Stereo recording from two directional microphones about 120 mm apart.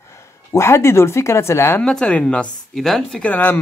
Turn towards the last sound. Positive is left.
turn(degrees=15)  # may be behind; listen again after turning